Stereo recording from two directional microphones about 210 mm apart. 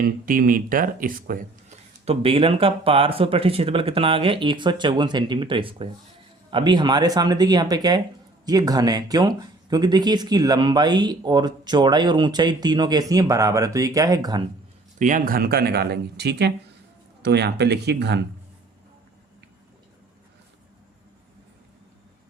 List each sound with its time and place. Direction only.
0.0 s speech: 40° right (ahead or behind)
2.0 s speech: 25° right (ahead or behind)
14.9 s speech: 40° right (ahead or behind)